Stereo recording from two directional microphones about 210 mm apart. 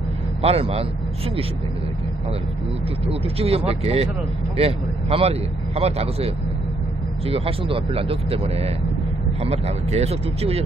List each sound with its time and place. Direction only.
0.4 s speech: 30° right (ahead or behind)
3.3 s speech: 30° right (ahead or behind)